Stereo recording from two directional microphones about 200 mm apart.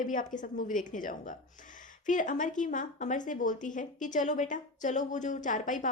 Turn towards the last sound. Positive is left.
turn(degrees=40)  # may be behind; listen again after turning